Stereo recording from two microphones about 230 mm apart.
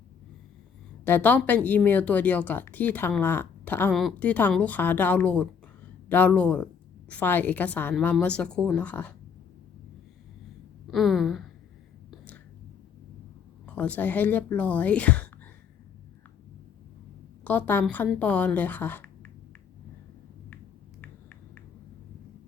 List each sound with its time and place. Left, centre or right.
1.0 s a woman's voice: centre
10.9 s a woman's voice: centre
13.7 s speech: centre
17.4 s speech: centre